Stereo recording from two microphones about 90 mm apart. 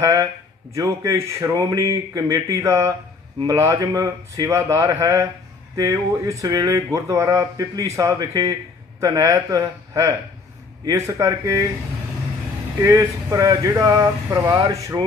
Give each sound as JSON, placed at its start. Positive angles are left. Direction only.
{"t": 0.0, "sound": "speech", "side_deg": -35}
{"t": 12.8, "sound": "speech", "side_deg": -40}